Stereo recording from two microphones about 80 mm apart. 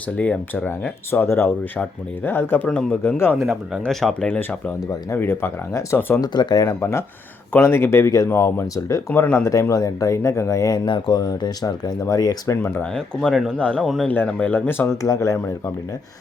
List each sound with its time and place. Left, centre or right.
0.2 s speech: centre
2.6 s speech: centre
3.0 s speech: left
3.3 s speech: centre
4.3 s speech: centre
5.1 s speech: left
6.2 s speech: left
6.7 s speech: left
10.8 s speech: left
12.8 s speech: centre
13.8 s speech: centre
14.5 s speech: left
15.0 s speech: left